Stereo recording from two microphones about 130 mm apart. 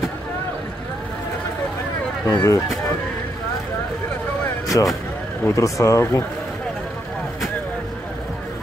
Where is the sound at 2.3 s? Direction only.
25° left (ahead or behind).